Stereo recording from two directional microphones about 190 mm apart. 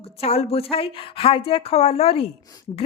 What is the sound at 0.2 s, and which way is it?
A woman's voice, 30° left (ahead or behind).